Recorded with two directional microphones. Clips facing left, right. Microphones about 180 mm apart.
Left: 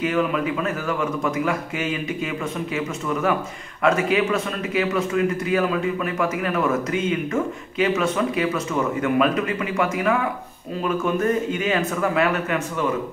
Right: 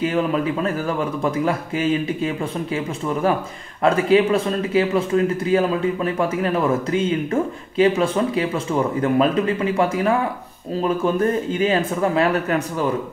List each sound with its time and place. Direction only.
0.0 s a man's voice: 30° right (ahead or behind)